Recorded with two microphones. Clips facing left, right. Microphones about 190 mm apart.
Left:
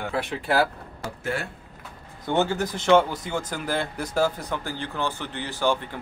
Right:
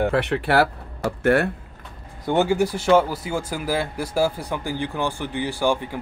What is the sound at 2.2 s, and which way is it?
Speech, 10° right (ahead or behind).